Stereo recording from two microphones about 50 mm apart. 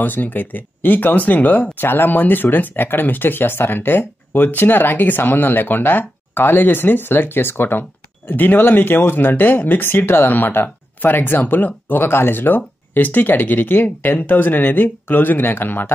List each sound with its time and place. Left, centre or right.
0.0 s speech: left